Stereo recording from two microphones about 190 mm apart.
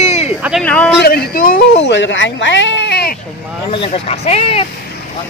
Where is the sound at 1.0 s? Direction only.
55° left (ahead or behind).